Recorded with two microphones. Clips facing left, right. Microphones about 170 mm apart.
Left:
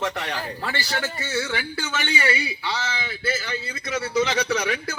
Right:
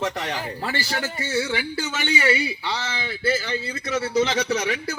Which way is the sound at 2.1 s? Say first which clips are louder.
Right 5 dB; 25° right (ahead or behind).